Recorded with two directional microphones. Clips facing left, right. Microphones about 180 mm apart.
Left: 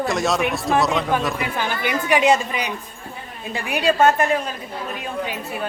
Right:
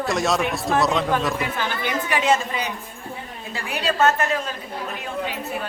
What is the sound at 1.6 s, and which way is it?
A woman's voice, 10° left (ahead or behind).